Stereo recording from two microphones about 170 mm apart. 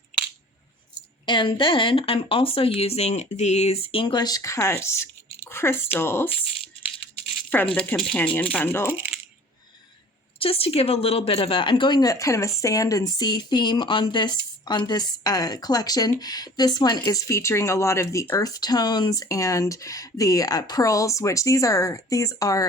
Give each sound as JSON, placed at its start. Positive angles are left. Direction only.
{"t": 1.2, "sound": "speech", "side_deg": 30}
{"t": 7.5, "sound": "speech", "side_deg": 10}
{"t": 10.4, "sound": "a woman's voice", "side_deg": 35}